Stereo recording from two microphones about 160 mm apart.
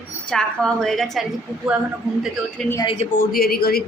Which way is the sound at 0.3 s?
5° left (ahead or behind).